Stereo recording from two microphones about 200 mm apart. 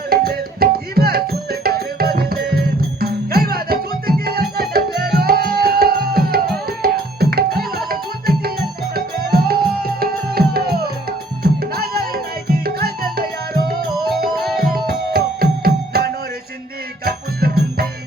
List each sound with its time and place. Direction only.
0.1 s music: 50° right (ahead or behind)
14.3 s music: centre (ahead or behind)
14.8 s music: 50° right (ahead or behind)